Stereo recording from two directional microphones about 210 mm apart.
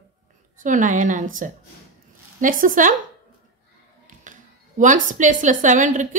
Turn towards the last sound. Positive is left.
turn(degrees=-35)  # may be behind; listen again after turning